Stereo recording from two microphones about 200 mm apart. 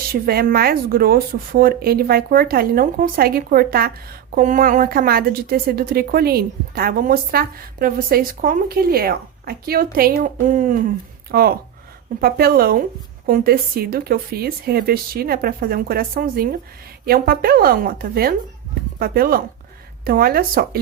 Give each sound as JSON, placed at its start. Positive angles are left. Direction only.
{"t": 0.1, "sound": "a woman's voice", "side_deg": -50}